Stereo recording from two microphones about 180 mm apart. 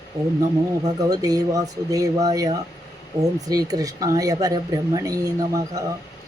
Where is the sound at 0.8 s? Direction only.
20° right (ahead or behind).